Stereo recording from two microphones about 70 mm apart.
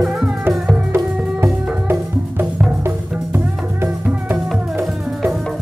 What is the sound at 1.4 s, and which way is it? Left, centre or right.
Music, right.